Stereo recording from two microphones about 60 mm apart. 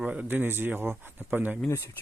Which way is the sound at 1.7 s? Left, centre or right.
Left.